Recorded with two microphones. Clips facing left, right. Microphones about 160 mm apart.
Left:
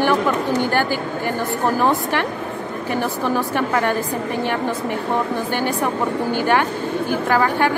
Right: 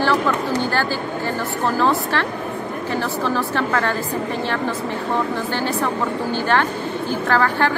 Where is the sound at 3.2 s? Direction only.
15° left (ahead or behind).